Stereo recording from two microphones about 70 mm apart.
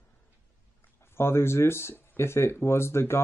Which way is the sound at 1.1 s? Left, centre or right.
Left.